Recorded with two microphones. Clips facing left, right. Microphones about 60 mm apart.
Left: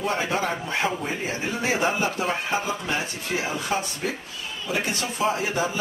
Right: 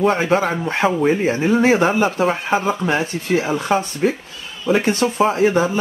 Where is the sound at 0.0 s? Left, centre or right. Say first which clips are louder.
Right 9 dB; right.